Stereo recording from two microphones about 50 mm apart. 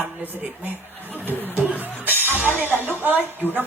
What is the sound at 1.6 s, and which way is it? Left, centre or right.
Music, right.